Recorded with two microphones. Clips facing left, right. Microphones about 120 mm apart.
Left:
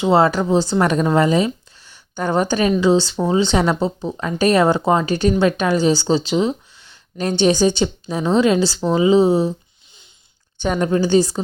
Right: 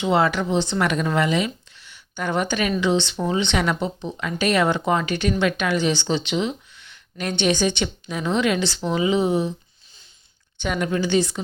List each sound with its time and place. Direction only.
0.0 s speech: 35° left (ahead or behind)
10.6 s speech: 35° left (ahead or behind)